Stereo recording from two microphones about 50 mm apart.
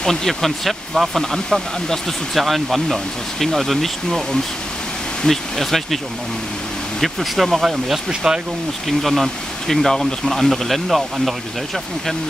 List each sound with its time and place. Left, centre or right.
0.0 s speech: centre
7.0 s speech: centre
8.1 s speech: centre
8.8 s speech: centre